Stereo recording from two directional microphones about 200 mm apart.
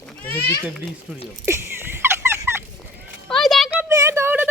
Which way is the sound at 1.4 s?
10° right (ahead or behind).